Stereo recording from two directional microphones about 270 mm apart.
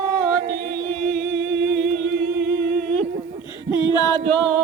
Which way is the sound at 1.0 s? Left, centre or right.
Right.